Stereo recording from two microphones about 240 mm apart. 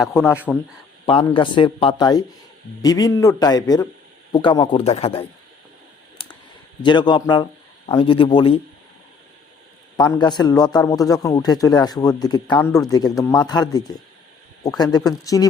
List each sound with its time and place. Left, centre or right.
0.0 s a man's voice: centre
1.0 s a man's voice: left
6.2 s clicking: left
6.8 s a man's voice: centre
10.0 s a man's voice: centre